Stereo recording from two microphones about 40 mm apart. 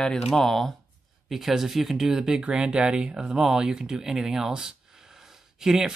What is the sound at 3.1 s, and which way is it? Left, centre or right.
Speech, centre.